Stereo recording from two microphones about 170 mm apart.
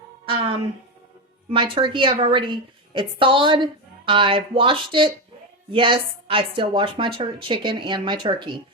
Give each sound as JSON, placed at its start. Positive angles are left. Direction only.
{"t": 1.5, "sound": "a woman's voice", "side_deg": -30}